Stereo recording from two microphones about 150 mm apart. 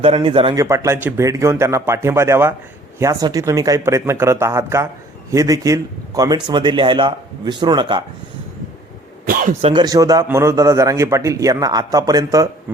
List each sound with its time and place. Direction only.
0.0 s a man's voice: 40° right (ahead or behind)
9.2 s a man's voice: 70° right (ahead or behind)
9.6 s a man's voice: 40° right (ahead or behind)
9.8 s a man's voice: 25° right (ahead or behind)